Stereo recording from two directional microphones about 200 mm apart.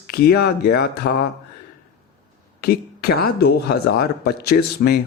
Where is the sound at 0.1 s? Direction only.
50° left (ahead or behind).